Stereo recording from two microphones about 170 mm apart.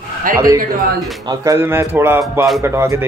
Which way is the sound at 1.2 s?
20° right (ahead or behind).